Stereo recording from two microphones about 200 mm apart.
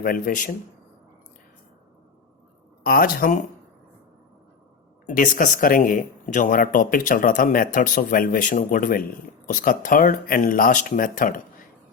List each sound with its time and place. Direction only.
0.0 s speech: 45° left (ahead or behind)
2.8 s speech: 45° left (ahead or behind)
5.0 s speech: 40° left (ahead or behind)